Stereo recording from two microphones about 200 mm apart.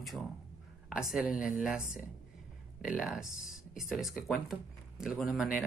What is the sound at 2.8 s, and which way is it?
Speech, 5° right (ahead or behind).